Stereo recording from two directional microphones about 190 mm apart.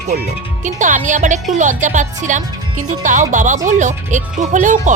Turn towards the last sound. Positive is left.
turn(degrees=-40)  # may be behind; listen again after turning